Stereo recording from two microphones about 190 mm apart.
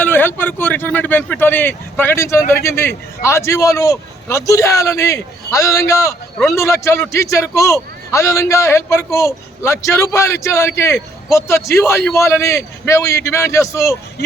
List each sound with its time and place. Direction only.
0.0 s a man's voice: 10° left (ahead or behind)